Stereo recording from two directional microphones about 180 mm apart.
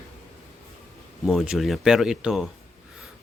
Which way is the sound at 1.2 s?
Centre (ahead or behind).